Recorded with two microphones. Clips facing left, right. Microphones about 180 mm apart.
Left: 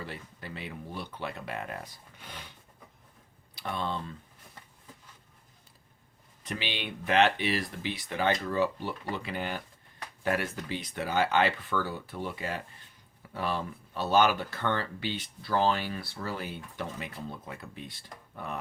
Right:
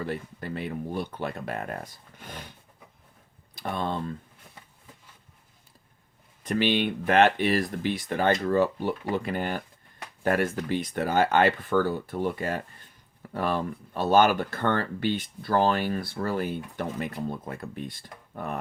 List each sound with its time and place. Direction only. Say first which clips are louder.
0.0 s speech: right 9 dB; 50° right (ahead or behind)
3.5 s speech: right 4 dB; 50° right (ahead or behind)
6.4 s speech: right 12 dB; 50° right (ahead or behind)